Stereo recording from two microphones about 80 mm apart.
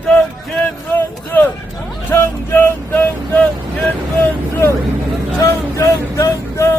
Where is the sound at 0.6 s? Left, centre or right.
Left.